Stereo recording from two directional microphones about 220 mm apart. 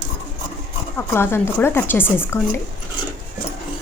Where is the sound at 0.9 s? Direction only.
10° left (ahead or behind).